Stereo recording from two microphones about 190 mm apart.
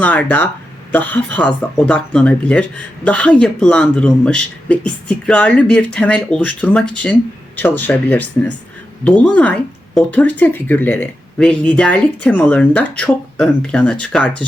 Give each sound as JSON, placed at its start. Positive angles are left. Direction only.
{"t": 0.0, "sound": "speech", "side_deg": 10}